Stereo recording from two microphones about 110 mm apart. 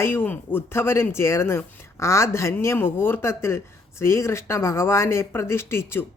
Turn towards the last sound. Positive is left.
turn(degrees=20)  # may be behind; listen again after turning